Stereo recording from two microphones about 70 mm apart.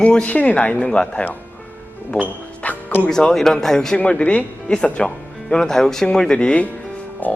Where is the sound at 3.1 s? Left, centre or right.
Centre.